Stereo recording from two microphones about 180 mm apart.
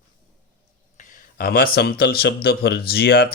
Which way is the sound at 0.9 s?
45° left (ahead or behind).